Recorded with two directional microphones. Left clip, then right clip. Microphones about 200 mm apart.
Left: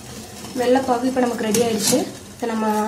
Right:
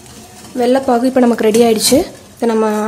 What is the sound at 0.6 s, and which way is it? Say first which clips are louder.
A woman's voice: right 6 dB; 50° right (ahead or behind).